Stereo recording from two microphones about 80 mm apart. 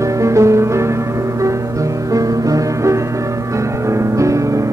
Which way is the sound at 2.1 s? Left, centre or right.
Right.